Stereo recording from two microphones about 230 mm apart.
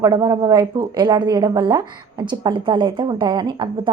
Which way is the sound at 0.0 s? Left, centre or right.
Centre.